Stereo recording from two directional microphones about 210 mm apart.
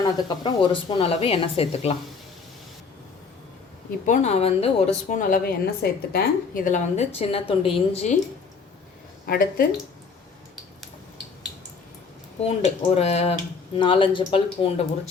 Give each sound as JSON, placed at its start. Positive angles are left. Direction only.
{"t": 0.0, "sound": "speech", "side_deg": 20}
{"t": 4.0, "sound": "a woman's voice", "side_deg": 35}
{"t": 9.2, "sound": "speech", "side_deg": 45}
{"t": 12.4, "sound": "speech", "side_deg": 30}